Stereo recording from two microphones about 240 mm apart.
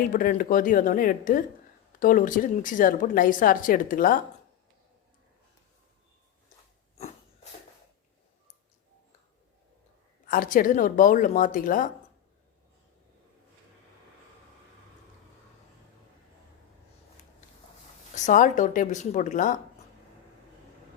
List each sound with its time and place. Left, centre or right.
0.1 s speech: left
10.2 s speech: left
18.1 s speech: left